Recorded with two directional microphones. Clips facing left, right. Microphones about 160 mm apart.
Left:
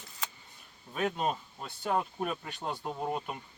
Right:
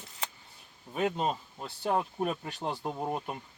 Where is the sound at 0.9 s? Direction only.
15° right (ahead or behind).